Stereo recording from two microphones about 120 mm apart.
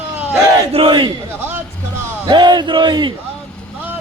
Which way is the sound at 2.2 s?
40° right (ahead or behind).